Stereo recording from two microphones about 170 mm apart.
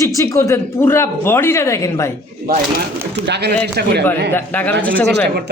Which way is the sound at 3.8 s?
65° right (ahead or behind).